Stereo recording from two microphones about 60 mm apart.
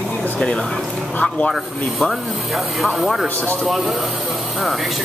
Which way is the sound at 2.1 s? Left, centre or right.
Centre.